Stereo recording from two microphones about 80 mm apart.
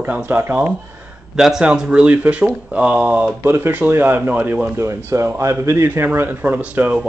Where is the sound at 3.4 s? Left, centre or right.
Right.